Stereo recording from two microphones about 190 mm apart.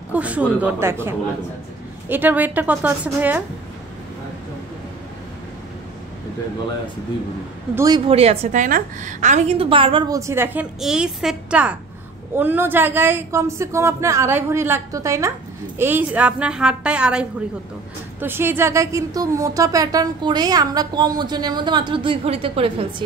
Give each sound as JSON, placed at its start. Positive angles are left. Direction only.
{"t": 0.1, "sound": "speech", "side_deg": -5}
{"t": 7.7, "sound": "a woman's voice", "side_deg": -20}
{"t": 8.1, "sound": "a woman's voice", "side_deg": -35}